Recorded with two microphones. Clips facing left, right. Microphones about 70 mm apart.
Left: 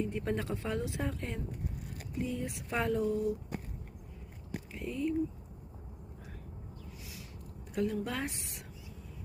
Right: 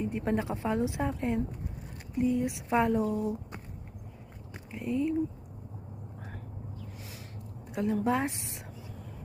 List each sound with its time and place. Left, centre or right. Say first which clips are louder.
0.0 s speech: right 4 dB; centre
4.7 s speech: right 5 dB; centre
7.7 s a woman's voice: right 5 dB; centre